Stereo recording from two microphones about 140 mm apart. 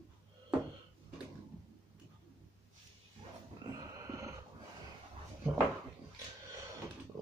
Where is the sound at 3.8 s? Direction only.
25° right (ahead or behind).